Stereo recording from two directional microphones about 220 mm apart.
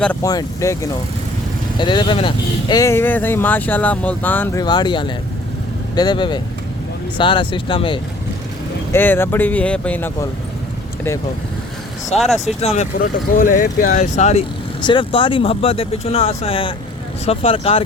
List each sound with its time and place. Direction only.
0.0 s speech: 10° left (ahead or behind)
4.6 s speech: 20° left (ahead or behind)
8.9 s speech: 10° left (ahead or behind)
12.5 s speech: 30° left (ahead or behind)